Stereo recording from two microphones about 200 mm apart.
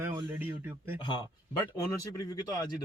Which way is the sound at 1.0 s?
25° left (ahead or behind).